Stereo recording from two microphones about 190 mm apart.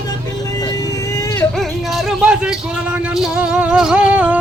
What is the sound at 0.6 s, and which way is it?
Vehicle, 20° left (ahead or behind).